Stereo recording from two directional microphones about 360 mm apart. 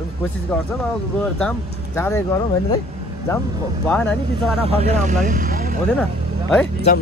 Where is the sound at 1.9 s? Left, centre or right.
Centre.